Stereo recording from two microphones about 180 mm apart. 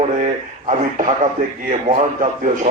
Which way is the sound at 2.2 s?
50° right (ahead or behind).